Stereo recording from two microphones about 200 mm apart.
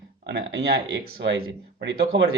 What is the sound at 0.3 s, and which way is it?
Speech, 60° right (ahead or behind).